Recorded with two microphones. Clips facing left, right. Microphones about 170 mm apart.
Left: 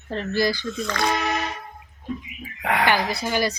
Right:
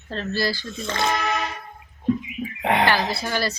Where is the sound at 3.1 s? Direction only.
15° left (ahead or behind).